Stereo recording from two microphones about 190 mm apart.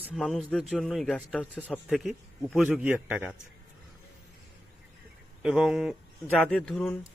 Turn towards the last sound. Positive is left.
turn(degrees=5)  # may be behind; listen again after turning